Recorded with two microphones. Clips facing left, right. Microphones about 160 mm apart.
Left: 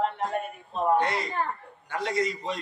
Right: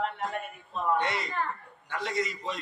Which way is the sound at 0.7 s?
30° left (ahead or behind).